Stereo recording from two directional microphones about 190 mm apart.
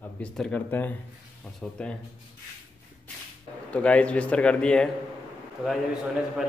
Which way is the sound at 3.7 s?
5° left (ahead or behind).